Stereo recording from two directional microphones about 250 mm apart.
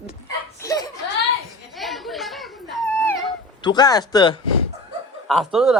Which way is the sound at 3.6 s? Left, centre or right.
Centre.